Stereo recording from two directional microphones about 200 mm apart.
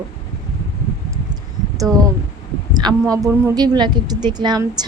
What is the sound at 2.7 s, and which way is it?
A woman's voice, 20° right (ahead or behind).